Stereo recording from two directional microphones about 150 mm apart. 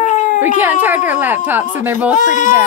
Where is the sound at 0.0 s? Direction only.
55° left (ahead or behind).